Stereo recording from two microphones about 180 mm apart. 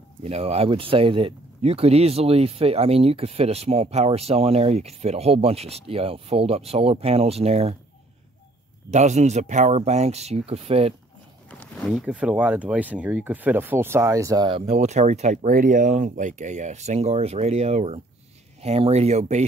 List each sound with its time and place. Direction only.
0.2 s speech: 35° right (ahead or behind)
8.9 s speech: 40° right (ahead or behind)
11.6 s speech: centre (ahead or behind); by 14.6 s 20° right (ahead or behind)
14.8 s speech: 40° right (ahead or behind)